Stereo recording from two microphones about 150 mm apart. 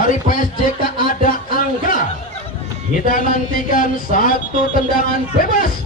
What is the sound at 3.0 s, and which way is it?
Speech, 70° left (ahead or behind).